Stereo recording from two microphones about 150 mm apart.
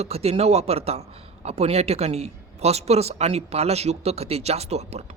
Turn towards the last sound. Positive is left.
turn(degrees=-45)  # may be behind; listen again after turning